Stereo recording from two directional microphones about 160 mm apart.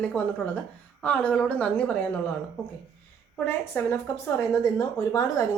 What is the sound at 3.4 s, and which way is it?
Speech, 15° left (ahead or behind).